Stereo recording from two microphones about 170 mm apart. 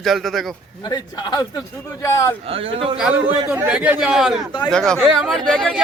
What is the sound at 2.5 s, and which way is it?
Speech, 35° right (ahead or behind).